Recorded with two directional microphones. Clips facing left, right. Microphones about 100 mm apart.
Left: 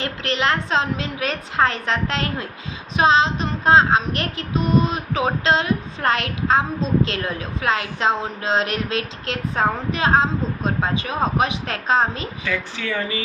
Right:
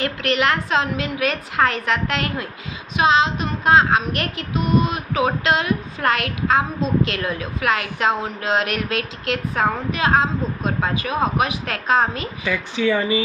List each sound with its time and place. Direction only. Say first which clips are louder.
0.0 s a woman's voice: right 2 dB; 30° left (ahead or behind)
3.0 s child singing: even; 35° left (ahead or behind)
7.1 s a woman's voice: right 1 dB; 30° left (ahead or behind)
12.4 s speech: right 6 dB; 15° right (ahead or behind)